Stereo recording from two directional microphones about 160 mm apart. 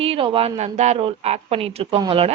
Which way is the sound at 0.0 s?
35° right (ahead or behind).